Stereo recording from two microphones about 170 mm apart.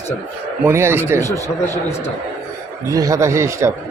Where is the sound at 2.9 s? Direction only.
20° right (ahead or behind).